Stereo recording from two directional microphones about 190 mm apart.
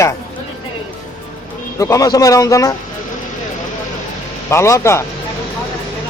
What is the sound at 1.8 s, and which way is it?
Speech, 15° left (ahead or behind).